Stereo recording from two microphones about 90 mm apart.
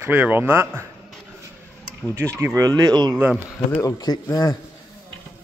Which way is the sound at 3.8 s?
45° left (ahead or behind).